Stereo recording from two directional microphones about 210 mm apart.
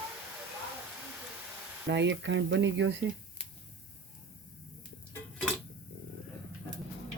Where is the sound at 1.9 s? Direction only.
60° right (ahead or behind).